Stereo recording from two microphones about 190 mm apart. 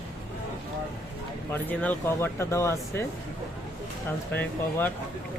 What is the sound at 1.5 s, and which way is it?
Speech, 10° left (ahead or behind).